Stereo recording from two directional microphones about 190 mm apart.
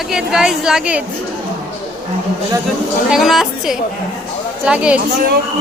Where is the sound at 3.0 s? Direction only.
Centre (ahead or behind).